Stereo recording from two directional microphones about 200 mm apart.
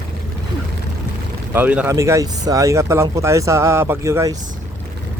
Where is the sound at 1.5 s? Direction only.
10° right (ahead or behind).